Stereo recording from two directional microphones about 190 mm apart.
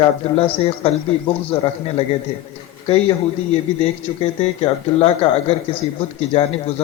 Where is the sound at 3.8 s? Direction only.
35° left (ahead or behind).